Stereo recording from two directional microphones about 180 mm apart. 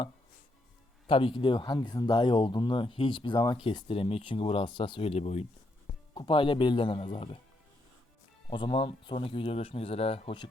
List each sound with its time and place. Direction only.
1.0 s speech: 30° left (ahead or behind)
8.4 s speech: 25° left (ahead or behind)